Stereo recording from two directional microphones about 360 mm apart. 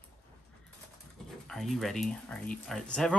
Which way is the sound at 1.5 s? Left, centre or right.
Centre.